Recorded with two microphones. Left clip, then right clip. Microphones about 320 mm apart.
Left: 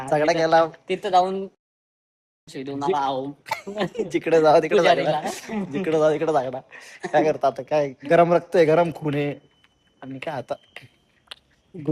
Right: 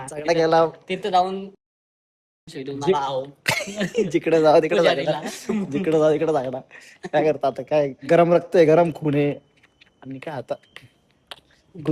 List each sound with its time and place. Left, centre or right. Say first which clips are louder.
0.1 s speech: left 1 dB; centre
0.9 s speech: left 1 dB; centre
2.5 s speech: right 2 dB; centre
3.4 s a sound: right 6 dB; centre
4.1 s a man's voice: even; centre
4.9 s speech: left 1 dB; centre
5.2 s speech: left 3 dB; centre
5.5 s speech: right 3 dB; centre
5.8 s a man's voice: right 1 dB; centre